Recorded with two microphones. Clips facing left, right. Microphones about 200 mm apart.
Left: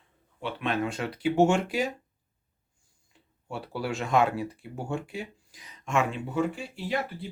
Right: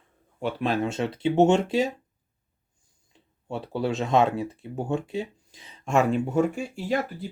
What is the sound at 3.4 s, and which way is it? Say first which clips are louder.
Speech: right 5 dB; 25° right (ahead or behind).